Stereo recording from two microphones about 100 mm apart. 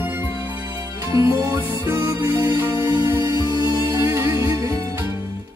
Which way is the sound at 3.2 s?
40° right (ahead or behind).